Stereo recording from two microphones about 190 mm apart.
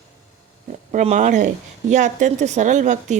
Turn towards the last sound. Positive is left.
turn(degrees=-40)  # may be behind; listen again after turning